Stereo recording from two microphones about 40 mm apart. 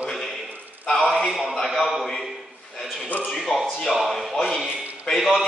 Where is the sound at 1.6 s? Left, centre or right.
Centre.